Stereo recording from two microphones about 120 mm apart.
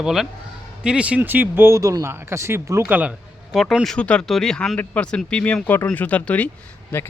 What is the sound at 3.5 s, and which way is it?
Speech, centre (ahead or behind).